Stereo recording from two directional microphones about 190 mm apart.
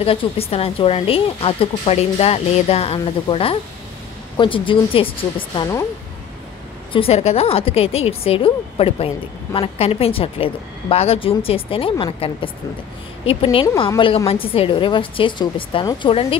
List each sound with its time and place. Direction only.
0.0 s a woman's voice: 30° left (ahead or behind)
6.9 s a woman's voice: 30° left (ahead or behind)